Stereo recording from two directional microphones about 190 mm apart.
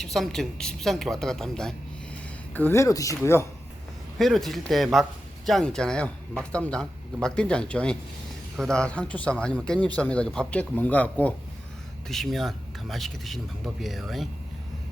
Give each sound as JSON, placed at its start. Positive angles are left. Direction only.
{"t": 0.0, "sound": "a man's voice", "side_deg": 0}
{"t": 4.2, "sound": "a man's voice", "side_deg": 0}